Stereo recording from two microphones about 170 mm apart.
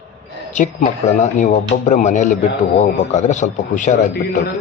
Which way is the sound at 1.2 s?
45° left (ahead or behind).